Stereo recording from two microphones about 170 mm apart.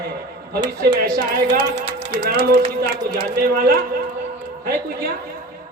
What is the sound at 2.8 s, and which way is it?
A man's voice, 60° right (ahead or behind).